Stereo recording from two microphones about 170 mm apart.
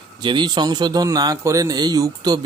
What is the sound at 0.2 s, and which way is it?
Speech, 25° right (ahead or behind).